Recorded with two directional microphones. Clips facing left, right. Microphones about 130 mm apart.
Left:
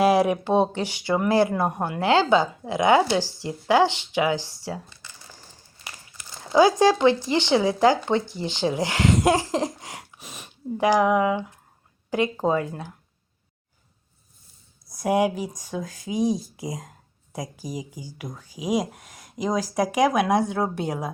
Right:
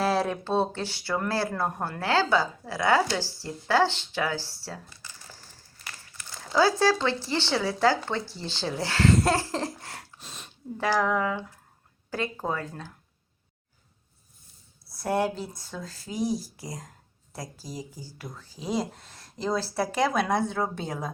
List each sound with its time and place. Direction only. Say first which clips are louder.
0.0 s speech: left 7 dB; 15° left (ahead or behind)
6.4 s speech: left 5 dB; 20° left (ahead or behind)
14.8 s speech: left 5 dB; 15° left (ahead or behind)